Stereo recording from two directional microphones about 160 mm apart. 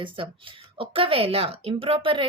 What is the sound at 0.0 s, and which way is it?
Speech, 35° right (ahead or behind).